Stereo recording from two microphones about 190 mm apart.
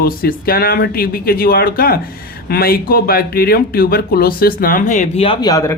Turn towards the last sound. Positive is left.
turn(degrees=20)  # may be behind; listen again after turning